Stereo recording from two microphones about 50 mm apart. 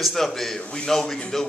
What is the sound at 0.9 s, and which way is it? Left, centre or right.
Speech, centre.